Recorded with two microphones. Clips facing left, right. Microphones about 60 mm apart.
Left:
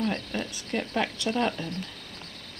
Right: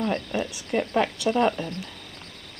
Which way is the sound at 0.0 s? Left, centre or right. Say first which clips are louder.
Right 3 dB; right.